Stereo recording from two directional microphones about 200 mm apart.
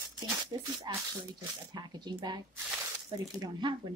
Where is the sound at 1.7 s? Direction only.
20° right (ahead or behind).